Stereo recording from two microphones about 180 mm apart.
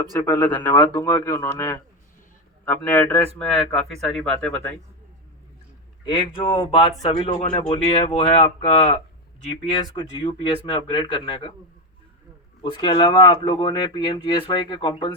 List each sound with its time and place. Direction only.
0.2 s speech: 10° left (ahead or behind)
6.1 s speech: 25° left (ahead or behind)
12.7 s speech: 25° left (ahead or behind)